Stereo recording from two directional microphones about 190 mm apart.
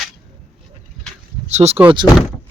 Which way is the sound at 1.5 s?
35° right (ahead or behind).